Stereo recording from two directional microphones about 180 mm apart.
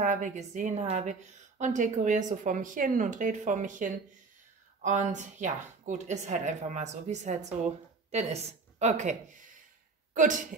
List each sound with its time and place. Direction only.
0.0 s a woman's voice: 45° right (ahead or behind)